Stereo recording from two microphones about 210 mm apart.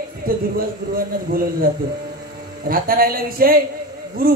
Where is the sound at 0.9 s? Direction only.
45° right (ahead or behind).